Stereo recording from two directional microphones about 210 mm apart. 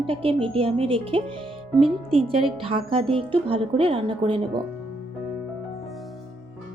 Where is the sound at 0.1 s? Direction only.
25° right (ahead or behind).